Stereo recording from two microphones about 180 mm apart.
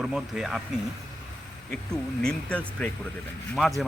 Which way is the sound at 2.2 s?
5° left (ahead or behind).